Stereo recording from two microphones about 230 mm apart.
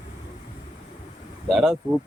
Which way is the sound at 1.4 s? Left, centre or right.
Centre.